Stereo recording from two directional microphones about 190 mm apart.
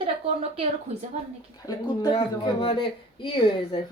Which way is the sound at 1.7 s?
20° left (ahead or behind).